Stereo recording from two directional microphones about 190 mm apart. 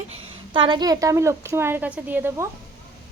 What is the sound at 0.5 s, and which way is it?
A woman's voice, 25° right (ahead or behind).